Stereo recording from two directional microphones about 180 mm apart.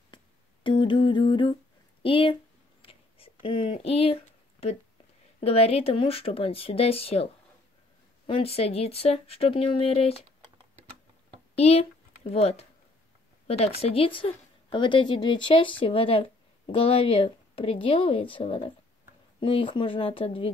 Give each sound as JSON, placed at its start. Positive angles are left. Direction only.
{"t": 0.7, "sound": "a woman's voice", "side_deg": 25}
{"t": 2.8, "sound": "a sound", "side_deg": 30}
{"t": 5.4, "sound": "speech", "side_deg": 35}
{"t": 8.3, "sound": "speech", "side_deg": 35}
{"t": 11.5, "sound": "a woman's voice", "side_deg": 35}